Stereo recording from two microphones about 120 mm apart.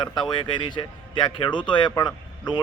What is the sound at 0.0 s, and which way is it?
Speech, 35° left (ahead or behind).